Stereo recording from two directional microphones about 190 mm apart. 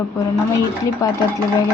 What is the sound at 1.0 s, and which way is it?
Speech, 15° left (ahead or behind).